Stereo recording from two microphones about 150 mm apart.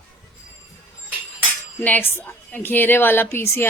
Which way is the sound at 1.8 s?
10° left (ahead or behind).